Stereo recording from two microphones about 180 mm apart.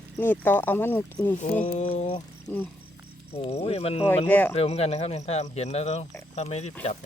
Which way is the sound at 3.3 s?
35° left (ahead or behind).